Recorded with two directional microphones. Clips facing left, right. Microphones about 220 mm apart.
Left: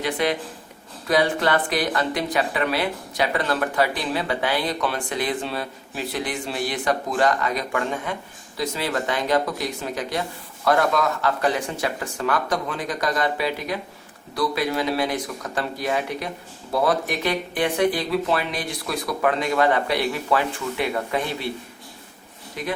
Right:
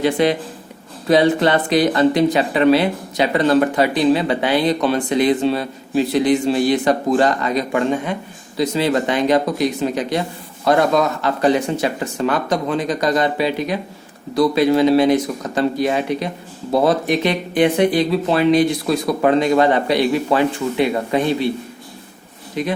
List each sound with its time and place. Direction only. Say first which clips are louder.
0.0 s speech: right 7 dB; 25° right (ahead or behind)
22.6 s speech: right 7 dB; 25° right (ahead or behind)